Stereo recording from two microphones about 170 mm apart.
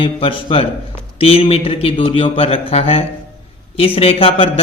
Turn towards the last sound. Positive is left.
turn(degrees=35)  # may be behind; listen again after turning